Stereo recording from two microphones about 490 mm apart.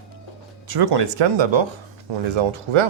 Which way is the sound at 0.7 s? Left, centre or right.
Right.